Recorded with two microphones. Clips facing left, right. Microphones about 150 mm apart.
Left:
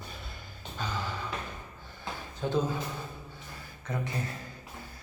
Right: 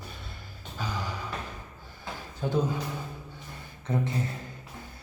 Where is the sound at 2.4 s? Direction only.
10° right (ahead or behind).